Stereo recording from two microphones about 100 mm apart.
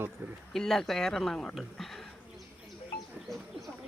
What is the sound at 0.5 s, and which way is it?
Speech, 5° left (ahead or behind).